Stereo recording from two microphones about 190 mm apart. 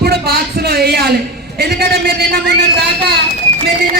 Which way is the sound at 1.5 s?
55° right (ahead or behind).